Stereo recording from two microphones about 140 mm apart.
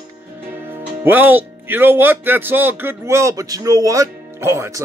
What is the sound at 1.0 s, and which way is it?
Speech, 15° right (ahead or behind).